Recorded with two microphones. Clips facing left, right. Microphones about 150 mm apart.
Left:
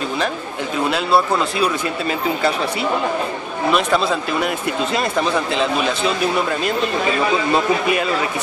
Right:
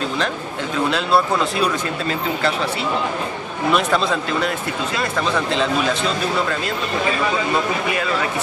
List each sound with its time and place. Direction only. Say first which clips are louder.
0.8 s speech: left 1 dB; 5° left (ahead or behind)
3.7 s speech: left 1 dB; 5° left (ahead or behind)